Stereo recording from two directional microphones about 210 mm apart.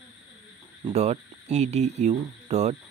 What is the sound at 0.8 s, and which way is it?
Speech, 30° right (ahead or behind).